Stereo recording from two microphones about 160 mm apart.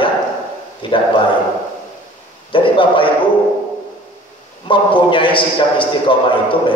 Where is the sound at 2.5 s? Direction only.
30° left (ahead or behind).